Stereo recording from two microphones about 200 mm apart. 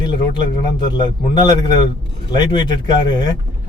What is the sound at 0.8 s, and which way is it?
A man's voice, 20° left (ahead or behind).